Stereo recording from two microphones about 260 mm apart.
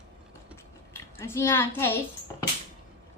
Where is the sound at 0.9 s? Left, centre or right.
Centre.